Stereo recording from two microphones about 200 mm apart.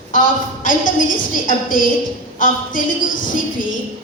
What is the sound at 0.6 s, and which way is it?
A woman's voice, 40° left (ahead or behind).